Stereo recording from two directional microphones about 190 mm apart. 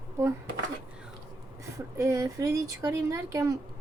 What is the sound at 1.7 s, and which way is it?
Speech, 15° right (ahead or behind).